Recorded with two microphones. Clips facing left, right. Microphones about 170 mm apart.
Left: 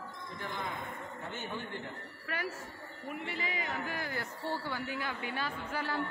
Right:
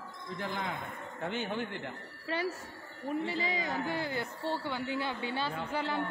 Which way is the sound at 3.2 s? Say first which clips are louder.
Right 4 dB; 35° right (ahead or behind).